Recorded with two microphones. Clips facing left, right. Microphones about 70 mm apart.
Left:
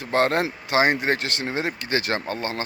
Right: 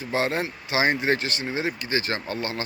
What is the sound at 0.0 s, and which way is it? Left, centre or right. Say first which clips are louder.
Speech: left 4 dB; left.